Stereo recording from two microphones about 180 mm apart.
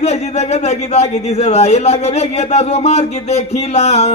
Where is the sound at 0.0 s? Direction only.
35° left (ahead or behind).